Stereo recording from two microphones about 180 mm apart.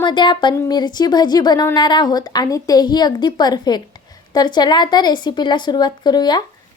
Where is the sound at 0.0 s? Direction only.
25° left (ahead or behind).